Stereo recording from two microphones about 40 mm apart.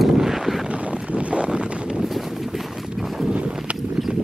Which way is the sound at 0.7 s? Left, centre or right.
Right.